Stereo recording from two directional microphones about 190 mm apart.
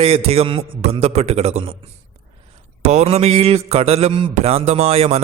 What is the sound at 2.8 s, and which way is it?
Speech, 35° right (ahead or behind).